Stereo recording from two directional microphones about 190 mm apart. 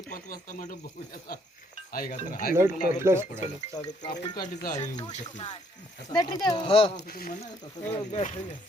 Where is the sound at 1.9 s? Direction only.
50° left (ahead or behind).